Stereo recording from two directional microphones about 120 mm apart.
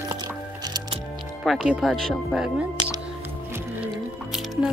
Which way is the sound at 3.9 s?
5° right (ahead or behind).